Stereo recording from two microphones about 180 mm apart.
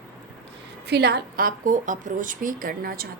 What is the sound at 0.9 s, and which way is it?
A woman's voice, 65° right (ahead or behind).